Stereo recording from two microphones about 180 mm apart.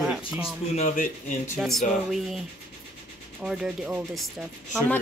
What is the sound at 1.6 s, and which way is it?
Speech, centre (ahead or behind).